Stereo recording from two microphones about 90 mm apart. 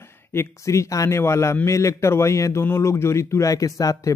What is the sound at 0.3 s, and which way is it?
A man's voice, 30° left (ahead or behind).